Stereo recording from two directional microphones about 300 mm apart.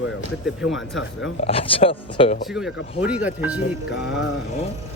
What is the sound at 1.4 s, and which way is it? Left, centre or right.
Speech, centre.